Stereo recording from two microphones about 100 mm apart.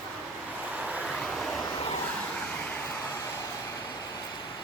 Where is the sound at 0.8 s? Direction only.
15° right (ahead or behind).